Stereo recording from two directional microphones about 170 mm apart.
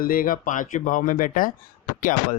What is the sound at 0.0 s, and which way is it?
Speech, 55° left (ahead or behind).